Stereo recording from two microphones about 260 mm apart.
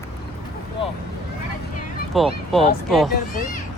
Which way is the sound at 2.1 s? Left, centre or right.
Centre.